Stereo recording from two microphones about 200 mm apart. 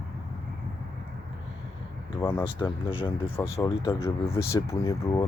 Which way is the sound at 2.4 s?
20° left (ahead or behind).